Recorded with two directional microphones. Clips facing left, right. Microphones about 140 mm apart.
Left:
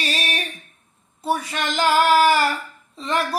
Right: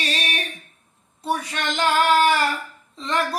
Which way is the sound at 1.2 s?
5° left (ahead or behind).